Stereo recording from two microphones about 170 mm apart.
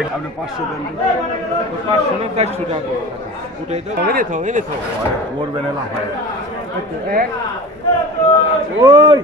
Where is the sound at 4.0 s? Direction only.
60° right (ahead or behind).